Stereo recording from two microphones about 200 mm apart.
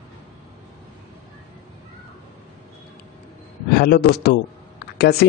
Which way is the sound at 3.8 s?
50° left (ahead or behind).